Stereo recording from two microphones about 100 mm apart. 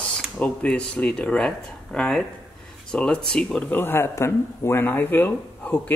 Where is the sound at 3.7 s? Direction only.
20° left (ahead or behind).